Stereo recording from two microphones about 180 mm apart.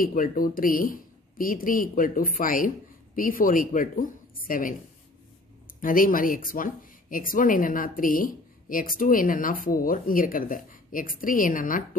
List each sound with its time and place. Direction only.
0.0 s speech: 50° left (ahead or behind)